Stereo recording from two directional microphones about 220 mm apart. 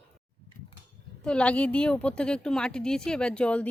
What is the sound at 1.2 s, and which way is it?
A woman's voice, 5° left (ahead or behind).